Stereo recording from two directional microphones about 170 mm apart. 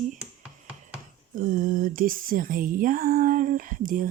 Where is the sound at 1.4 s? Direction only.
55° right (ahead or behind).